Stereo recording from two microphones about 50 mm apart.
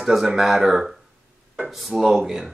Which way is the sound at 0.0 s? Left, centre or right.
Centre.